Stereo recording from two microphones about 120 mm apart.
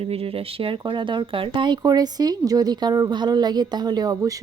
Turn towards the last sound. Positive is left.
turn(degrees=-30)  # may be behind; listen again after turning